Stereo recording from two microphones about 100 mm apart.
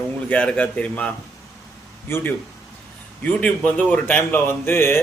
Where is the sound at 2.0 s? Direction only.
25° left (ahead or behind).